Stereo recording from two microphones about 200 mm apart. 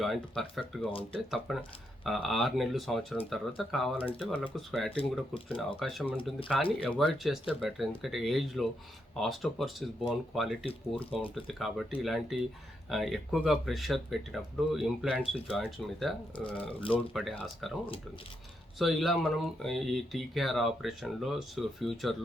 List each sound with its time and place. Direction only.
0.0 s speech: centre (ahead or behind)
4.9 s speech: 30° left (ahead or behind)
5.5 s speech: centre (ahead or behind)
18.8 s speech: centre (ahead or behind)